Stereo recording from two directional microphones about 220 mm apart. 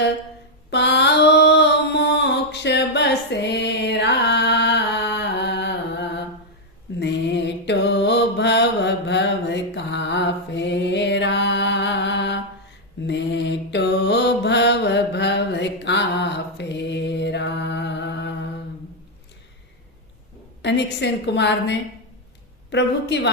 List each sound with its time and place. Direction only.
0.7 s a sound: 50° left (ahead or behind)
7.0 s mantra: 55° left (ahead or behind)
20.6 s a woman's voice: 50° left (ahead or behind)